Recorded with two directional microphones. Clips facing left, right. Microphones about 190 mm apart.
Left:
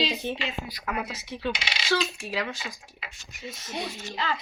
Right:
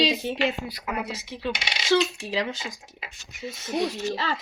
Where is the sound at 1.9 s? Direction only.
25° right (ahead or behind).